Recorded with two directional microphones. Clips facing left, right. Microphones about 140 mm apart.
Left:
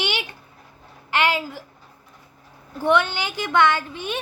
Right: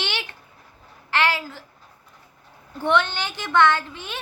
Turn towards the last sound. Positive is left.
turn(degrees=15)  # may be behind; listen again after turning